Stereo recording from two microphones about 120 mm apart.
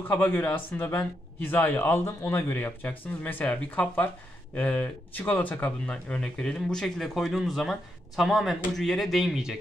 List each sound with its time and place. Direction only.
0.1 s speech: 15° left (ahead or behind); by 9.6 s 5° right (ahead or behind)